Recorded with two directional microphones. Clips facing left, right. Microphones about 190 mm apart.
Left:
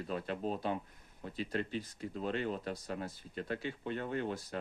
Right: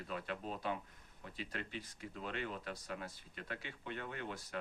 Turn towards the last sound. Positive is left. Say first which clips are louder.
# left 7 dB
turn(degrees=35)  # may be behind; listen again after turning